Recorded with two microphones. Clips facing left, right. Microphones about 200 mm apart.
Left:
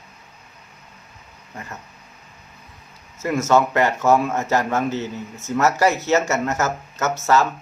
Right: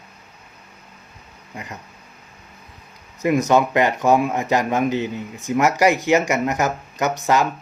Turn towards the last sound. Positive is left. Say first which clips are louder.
# even
turn(degrees=-15)  # may be behind; listen again after turning